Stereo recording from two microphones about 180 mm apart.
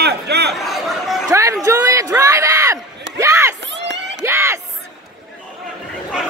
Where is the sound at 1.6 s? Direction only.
20° right (ahead or behind).